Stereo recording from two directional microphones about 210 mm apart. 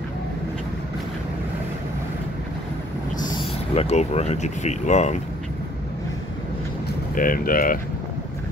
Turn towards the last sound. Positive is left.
turn(degrees=40)  # may be behind; listen again after turning